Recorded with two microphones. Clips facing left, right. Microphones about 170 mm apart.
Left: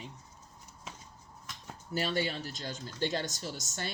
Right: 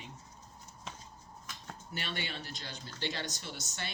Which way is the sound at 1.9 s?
40° left (ahead or behind).